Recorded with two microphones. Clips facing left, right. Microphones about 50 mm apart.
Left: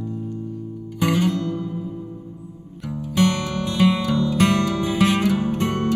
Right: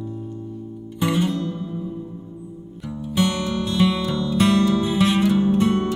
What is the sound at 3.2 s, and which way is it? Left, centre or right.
Music, left.